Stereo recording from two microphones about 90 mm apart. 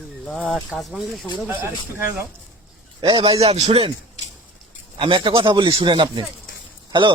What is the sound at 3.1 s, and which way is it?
Speech, 90° right.